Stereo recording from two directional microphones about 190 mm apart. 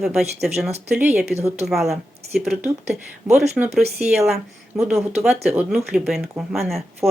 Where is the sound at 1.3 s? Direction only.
35° right (ahead or behind).